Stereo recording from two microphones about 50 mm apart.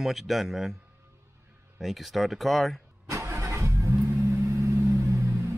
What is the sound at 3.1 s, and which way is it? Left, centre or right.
Vehicle, right.